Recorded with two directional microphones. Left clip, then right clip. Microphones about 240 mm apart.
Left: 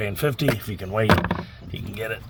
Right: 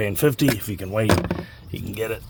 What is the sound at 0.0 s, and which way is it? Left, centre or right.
Speech, right.